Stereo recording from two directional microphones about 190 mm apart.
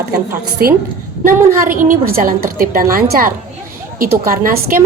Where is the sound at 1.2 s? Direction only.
45° right (ahead or behind).